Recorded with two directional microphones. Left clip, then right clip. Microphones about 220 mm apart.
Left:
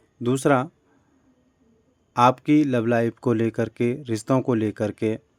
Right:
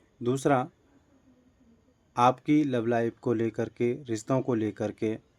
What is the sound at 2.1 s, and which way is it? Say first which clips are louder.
Speech: left 5 dB; 35° left (ahead or behind).